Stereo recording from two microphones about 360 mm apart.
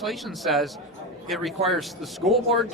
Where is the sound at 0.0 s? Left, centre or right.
Centre.